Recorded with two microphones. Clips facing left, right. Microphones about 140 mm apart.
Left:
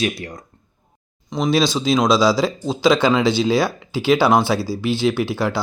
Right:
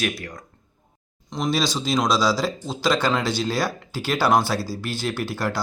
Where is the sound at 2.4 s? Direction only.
Centre (ahead or behind).